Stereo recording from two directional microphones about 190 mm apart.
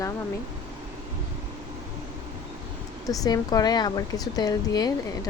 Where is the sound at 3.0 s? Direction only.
20° left (ahead or behind).